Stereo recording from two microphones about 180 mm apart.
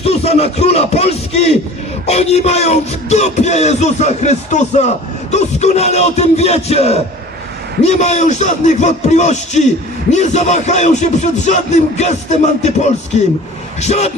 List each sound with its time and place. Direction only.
0.0 s speech: 35° left (ahead or behind)
2.0 s music: 35° left (ahead or behind)